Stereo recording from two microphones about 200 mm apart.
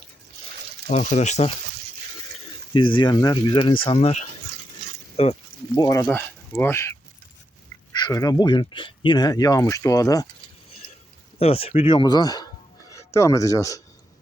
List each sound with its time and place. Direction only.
1.1 s speech: 35° left (ahead or behind)
2.7 s speech: 25° left (ahead or behind)
5.1 s a sound: 30° left (ahead or behind)
5.8 s speech: 15° left (ahead or behind)
7.9 s speech: 20° left (ahead or behind)
11.3 s speech: 30° left (ahead or behind)